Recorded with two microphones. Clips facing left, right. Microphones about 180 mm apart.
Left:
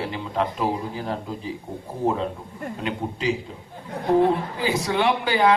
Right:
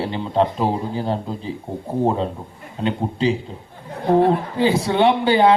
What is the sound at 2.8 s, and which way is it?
Speech, 30° right (ahead or behind).